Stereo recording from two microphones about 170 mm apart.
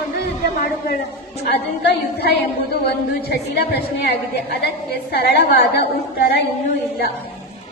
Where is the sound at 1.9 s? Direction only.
75° left (ahead or behind).